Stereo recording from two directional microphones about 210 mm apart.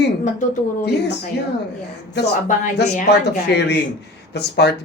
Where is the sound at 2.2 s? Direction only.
55° left (ahead or behind).